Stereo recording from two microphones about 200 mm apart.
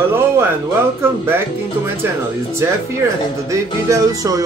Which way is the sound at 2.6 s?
15° right (ahead or behind).